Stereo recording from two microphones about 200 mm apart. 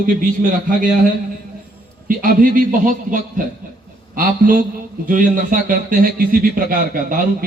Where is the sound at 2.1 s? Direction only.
45° right (ahead or behind).